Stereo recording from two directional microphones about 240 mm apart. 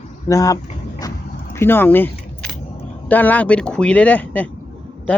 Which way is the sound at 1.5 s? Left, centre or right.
Centre.